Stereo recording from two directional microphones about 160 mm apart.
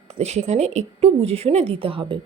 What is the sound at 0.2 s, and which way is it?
A woman's voice, 45° right (ahead or behind).